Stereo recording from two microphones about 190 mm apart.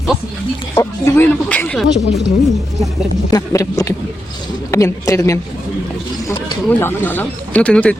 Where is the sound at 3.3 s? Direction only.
20° left (ahead or behind).